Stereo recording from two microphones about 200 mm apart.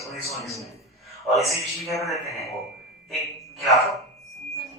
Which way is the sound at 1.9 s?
Centre (ahead or behind).